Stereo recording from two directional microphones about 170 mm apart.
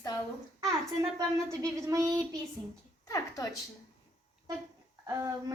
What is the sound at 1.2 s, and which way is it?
A woman's voice, 20° right (ahead or behind).